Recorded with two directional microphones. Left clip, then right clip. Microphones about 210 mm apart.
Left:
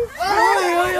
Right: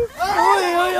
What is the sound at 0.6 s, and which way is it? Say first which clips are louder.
Speech: even; centre (ahead or behind).